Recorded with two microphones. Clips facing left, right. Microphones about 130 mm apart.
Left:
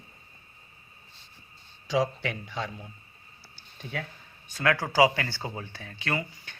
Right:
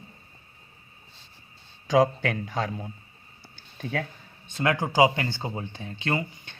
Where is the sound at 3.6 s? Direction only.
45° right (ahead or behind).